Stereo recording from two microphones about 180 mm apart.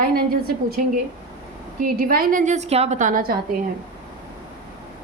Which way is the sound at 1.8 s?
55° right (ahead or behind).